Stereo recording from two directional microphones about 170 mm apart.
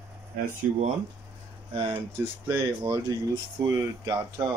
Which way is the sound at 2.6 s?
20° right (ahead or behind).